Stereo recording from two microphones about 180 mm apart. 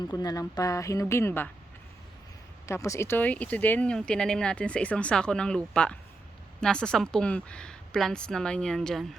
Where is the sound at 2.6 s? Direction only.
15° left (ahead or behind).